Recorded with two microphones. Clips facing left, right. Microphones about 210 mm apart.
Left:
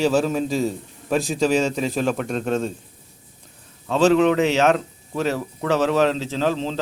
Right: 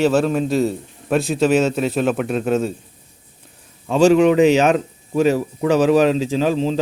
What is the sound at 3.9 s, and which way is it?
A man's voice, 15° right (ahead or behind).